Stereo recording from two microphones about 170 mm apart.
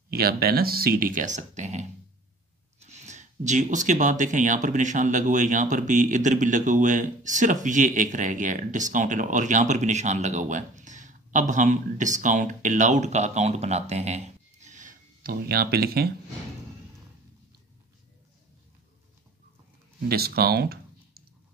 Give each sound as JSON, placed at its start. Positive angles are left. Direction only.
{"t": 0.1, "sound": "speech", "side_deg": -65}
{"t": 20.1, "sound": "speech", "side_deg": -65}